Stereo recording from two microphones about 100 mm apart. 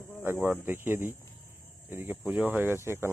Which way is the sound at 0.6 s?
20° right (ahead or behind).